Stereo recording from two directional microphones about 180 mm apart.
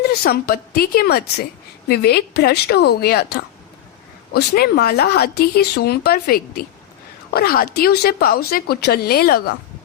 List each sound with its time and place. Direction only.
0.1 s speech: 60° left (ahead or behind)
4.3 s speech: 60° left (ahead or behind)